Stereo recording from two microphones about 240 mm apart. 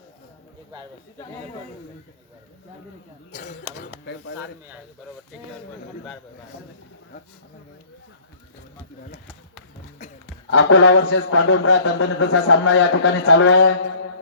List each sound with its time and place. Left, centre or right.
3.6 s speech: right
4.0 s a man's voice: left
10.0 s a sound: left
10.5 s a man's voice: left